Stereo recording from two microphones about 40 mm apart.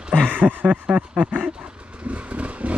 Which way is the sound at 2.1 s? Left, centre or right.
Right.